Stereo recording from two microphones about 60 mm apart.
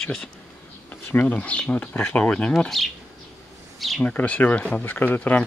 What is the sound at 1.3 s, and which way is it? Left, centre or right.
Speech, left.